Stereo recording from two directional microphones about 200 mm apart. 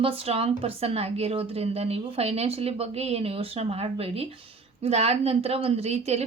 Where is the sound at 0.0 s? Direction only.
30° right (ahead or behind).